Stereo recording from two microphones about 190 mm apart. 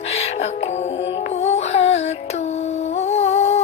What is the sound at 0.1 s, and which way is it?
Music, 35° left (ahead or behind).